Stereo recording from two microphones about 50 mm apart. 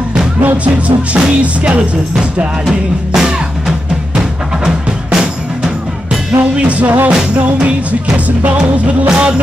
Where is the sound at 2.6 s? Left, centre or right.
Centre.